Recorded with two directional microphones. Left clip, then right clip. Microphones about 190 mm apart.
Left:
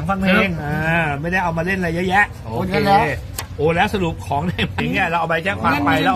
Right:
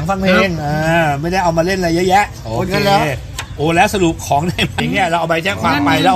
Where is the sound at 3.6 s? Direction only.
50° right (ahead or behind).